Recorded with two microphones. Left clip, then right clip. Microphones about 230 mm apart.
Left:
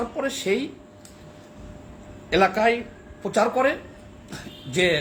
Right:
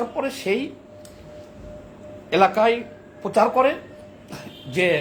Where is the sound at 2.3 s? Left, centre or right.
Right.